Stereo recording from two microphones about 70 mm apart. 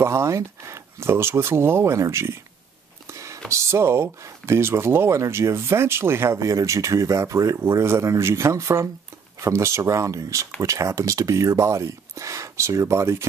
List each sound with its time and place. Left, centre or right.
0.0 s speech: right